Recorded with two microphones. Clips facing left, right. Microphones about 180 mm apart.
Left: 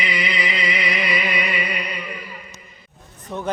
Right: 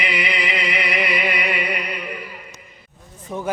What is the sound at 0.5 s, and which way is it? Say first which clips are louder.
Music: right 1 dB; 60° right (ahead or behind).